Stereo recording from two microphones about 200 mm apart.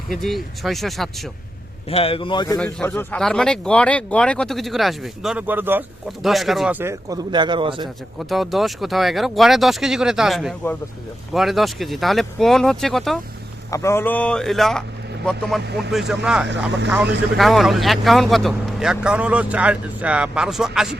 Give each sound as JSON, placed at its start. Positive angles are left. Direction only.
{"t": 0.1, "sound": "speech", "side_deg": 0}
{"t": 1.9, "sound": "speech", "side_deg": 30}
{"t": 2.6, "sound": "speech", "side_deg": 5}
{"t": 8.3, "sound": "speech", "side_deg": 0}
{"t": 13.7, "sound": "speech", "side_deg": 15}
{"t": 15.6, "sound": "speech", "side_deg": -55}
{"t": 15.9, "sound": "speech", "side_deg": 0}
{"t": 16.5, "sound": "speech", "side_deg": -60}
{"t": 17.3, "sound": "speech", "side_deg": 0}